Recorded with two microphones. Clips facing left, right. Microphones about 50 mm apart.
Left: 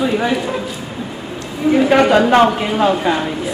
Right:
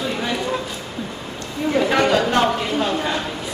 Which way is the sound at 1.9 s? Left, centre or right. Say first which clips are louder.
Left 7 dB; centre.